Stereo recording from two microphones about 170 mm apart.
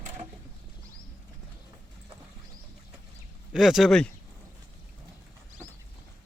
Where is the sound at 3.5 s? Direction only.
Centre (ahead or behind).